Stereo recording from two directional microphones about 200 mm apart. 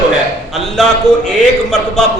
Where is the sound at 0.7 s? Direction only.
5° left (ahead or behind).